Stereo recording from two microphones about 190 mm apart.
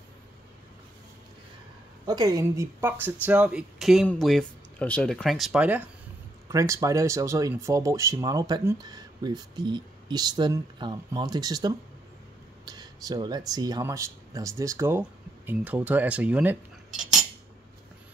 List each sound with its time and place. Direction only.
2.0 s speech: 20° right (ahead or behind)
12.6 s a sound: 20° right (ahead or behind)
13.5 s speech: 20° right (ahead or behind)